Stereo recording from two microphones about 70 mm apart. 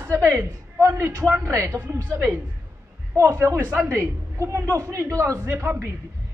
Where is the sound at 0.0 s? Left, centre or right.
Right.